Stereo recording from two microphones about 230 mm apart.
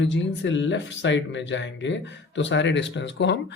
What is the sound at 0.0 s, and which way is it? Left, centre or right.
Speech, left.